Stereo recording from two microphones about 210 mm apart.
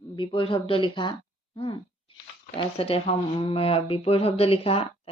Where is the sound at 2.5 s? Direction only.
25° left (ahead or behind).